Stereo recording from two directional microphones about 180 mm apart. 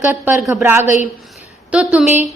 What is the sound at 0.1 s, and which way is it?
A woman's voice, 10° right (ahead or behind).